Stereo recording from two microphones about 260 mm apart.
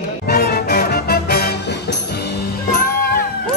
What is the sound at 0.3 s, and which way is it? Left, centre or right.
Music, left.